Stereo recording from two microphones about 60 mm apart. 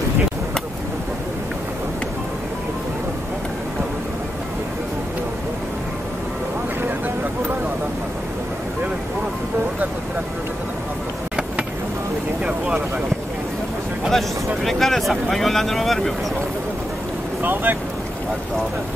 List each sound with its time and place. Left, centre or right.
12.4 s a sound: right
14.0 s vehicle: centre
17.4 s vehicle: right